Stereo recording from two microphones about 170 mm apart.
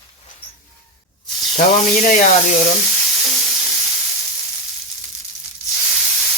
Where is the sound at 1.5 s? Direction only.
50° left (ahead or behind).